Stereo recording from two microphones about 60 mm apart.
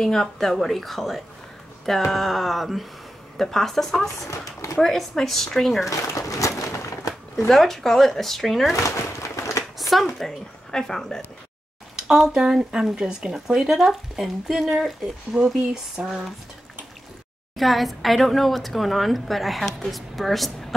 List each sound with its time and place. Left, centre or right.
0.0 s a woman's voice: centre
5.9 s speech: left
6.9 s a sound: left
7.4 s a woman's voice: centre
8.7 s a sound: left
9.8 s speech: centre
12.0 s speech: centre
17.6 s a woman's voice: centre